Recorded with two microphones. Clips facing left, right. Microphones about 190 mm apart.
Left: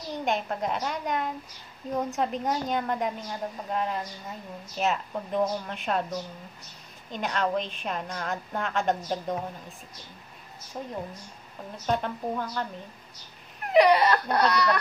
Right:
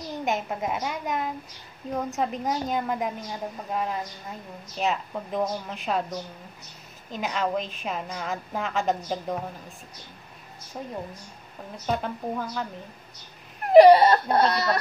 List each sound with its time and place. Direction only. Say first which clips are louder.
0.2 s a woman's voice: even; 5° right (ahead or behind)
7.1 s a woman's voice: even; 5° right (ahead or behind)
13.7 s speech: right 7 dB; 30° right (ahead or behind)